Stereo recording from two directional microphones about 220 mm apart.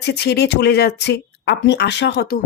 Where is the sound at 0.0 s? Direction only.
50° left (ahead or behind).